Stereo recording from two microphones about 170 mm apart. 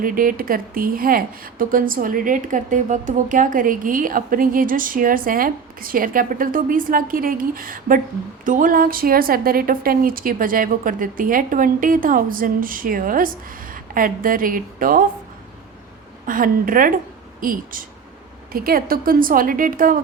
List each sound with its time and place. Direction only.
0.0 s a woman's voice: 55° right (ahead or behind)
16.2 s a woman's voice: 55° right (ahead or behind)